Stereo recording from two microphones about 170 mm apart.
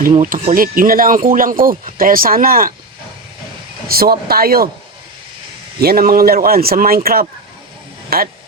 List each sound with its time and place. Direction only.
0.2 s speech: 50° right (ahead or behind)
3.8 s speech: 65° right (ahead or behind)
5.8 s speech: 60° right (ahead or behind)